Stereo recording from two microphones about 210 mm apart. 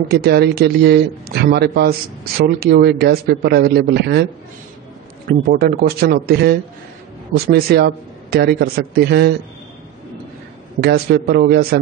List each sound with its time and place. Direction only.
0.1 s a man's voice: 50° right (ahead or behind)
5.5 s a man's voice: 45° right (ahead or behind)
10.8 s a man's voice: 50° right (ahead or behind)